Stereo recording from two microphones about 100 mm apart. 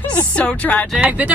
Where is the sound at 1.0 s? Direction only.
15° right (ahead or behind).